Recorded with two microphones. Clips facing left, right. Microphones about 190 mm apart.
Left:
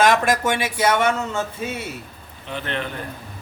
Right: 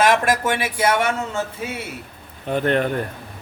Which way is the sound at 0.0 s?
5° right (ahead or behind).